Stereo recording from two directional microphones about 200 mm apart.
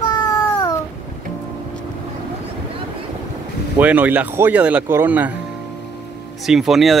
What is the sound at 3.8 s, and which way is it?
Speech, 10° right (ahead or behind).